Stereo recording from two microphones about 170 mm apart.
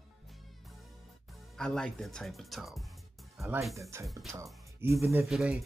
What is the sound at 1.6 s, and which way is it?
Speech, 5° left (ahead or behind).